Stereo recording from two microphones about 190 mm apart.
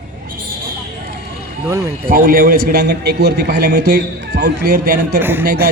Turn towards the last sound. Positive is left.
turn(degrees=-50)  # may be behind; listen again after turning